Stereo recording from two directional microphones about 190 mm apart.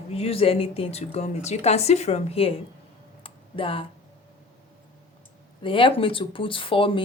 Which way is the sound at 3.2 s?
30° left (ahead or behind).